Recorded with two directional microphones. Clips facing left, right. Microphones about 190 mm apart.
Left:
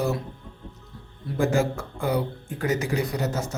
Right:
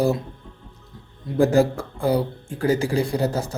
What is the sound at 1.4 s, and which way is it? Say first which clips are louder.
Speech: right 6 dB; 35° right (ahead or behind).